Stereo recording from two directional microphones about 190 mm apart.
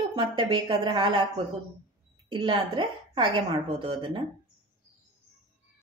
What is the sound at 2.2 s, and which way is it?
A woman's voice, 25° right (ahead or behind).